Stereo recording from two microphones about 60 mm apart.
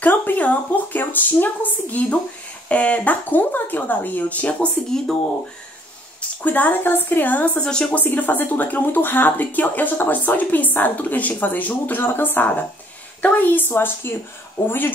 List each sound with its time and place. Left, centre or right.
0.0 s a sound: left
2.7 s speech: left
4.9 s speech: centre
6.4 s speech: left
7.5 s speech: centre
7.9 s speech: left